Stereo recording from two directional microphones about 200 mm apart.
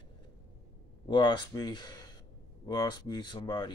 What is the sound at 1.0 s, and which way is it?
Speech, 20° left (ahead or behind).